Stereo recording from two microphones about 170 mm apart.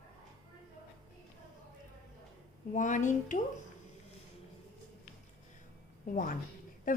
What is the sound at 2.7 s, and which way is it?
Speech, 50° left (ahead or behind).